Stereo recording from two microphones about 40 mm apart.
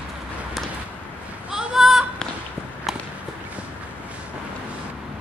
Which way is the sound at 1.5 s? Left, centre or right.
Centre.